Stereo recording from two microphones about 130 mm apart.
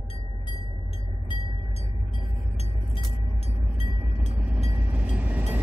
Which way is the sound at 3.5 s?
60° left (ahead or behind).